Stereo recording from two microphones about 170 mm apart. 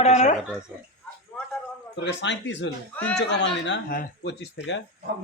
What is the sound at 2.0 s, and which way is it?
Speech, 90° left.